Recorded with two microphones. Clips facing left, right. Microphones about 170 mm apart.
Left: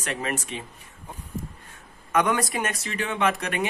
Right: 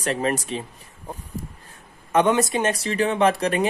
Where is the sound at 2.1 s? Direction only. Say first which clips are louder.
Right 5 dB; 25° right (ahead or behind).